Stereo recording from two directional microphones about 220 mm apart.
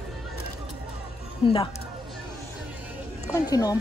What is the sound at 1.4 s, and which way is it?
Speech, 25° left (ahead or behind).